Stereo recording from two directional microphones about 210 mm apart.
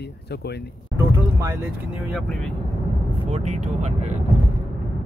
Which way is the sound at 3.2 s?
30° right (ahead or behind).